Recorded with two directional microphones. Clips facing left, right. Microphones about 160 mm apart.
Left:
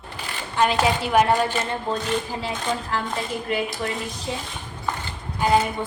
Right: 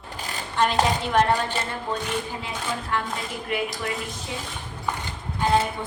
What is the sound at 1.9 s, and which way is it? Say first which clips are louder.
Speech: left 2 dB; 30° left (ahead or behind).